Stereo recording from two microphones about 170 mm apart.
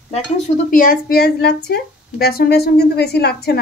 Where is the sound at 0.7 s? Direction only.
55° left (ahead or behind).